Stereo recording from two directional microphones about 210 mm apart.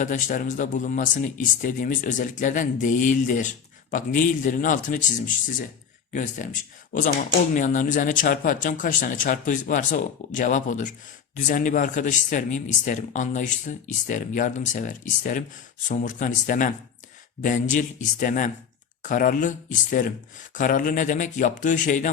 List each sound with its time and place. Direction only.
0.0 s speech: 40° left (ahead or behind)
6.1 s speech: 35° left (ahead or behind)